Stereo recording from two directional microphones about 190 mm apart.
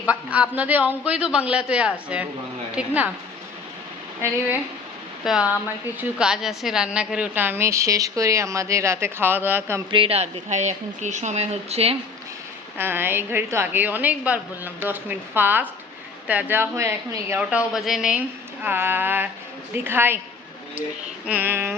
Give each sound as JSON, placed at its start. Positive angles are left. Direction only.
{"t": 0.0, "sound": "a woman's voice", "side_deg": -5}
{"t": 5.2, "sound": "a woman's voice", "side_deg": -5}
{"t": 9.9, "sound": "a woman's voice", "side_deg": -30}
{"t": 12.7, "sound": "a woman's voice", "side_deg": -10}
{"t": 17.7, "sound": "a woman's voice", "side_deg": 0}
{"t": 21.2, "sound": "a woman's voice", "side_deg": -10}